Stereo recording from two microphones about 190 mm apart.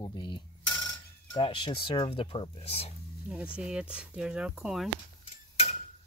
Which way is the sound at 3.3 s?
5° right (ahead or behind).